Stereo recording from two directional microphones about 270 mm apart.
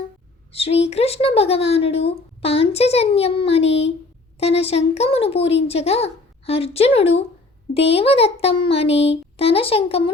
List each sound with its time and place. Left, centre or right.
0.5 s speech: left